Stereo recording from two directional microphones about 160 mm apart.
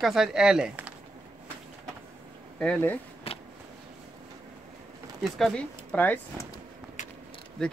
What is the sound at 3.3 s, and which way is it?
Vehicle, 40° left (ahead or behind).